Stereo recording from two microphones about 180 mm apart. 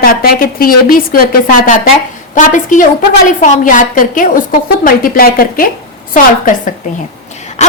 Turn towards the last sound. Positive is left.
turn(degrees=40)  # may be behind; listen again after turning